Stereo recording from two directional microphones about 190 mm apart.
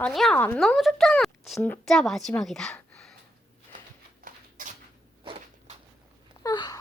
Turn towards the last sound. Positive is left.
turn(degrees=20)  # may be behind; listen again after turning